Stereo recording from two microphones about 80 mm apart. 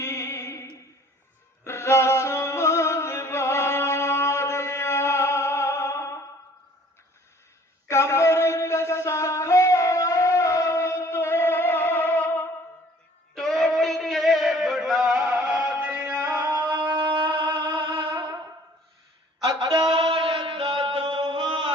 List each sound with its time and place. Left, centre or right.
0.0 s music: left
7.9 s a sound: left
13.3 s a sound: centre
16.9 s music: right
19.6 s mantra: right
19.9 s chant: right